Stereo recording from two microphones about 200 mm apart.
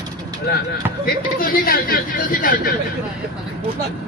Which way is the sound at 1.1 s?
45° left (ahead or behind).